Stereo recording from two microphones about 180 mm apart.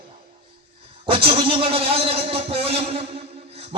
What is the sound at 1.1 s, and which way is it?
A man's voice, 30° right (ahead or behind).